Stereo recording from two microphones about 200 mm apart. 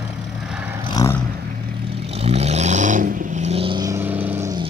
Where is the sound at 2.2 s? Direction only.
30° right (ahead or behind); by 4.6 s 15° right (ahead or behind).